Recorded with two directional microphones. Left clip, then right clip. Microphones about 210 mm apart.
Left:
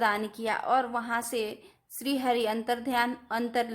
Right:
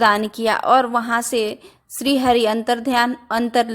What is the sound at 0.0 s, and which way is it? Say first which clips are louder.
A woman's voice: right 12 dB; 30° right (ahead or behind).